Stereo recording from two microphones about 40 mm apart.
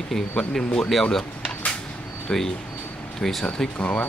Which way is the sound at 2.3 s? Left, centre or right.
Centre.